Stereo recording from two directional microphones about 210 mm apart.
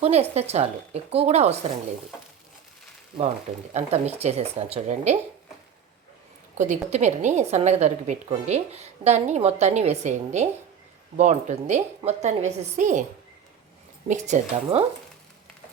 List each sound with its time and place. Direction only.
0.0 s a woman's voice: 30° right (ahead or behind)
3.2 s a woman's voice: 30° right (ahead or behind)
6.6 s a woman's voice: 35° right (ahead or behind)
14.1 s a woman's voice: 35° right (ahead or behind)